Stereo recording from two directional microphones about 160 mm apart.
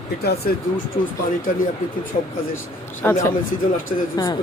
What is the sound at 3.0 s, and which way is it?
Speech, 20° left (ahead or behind).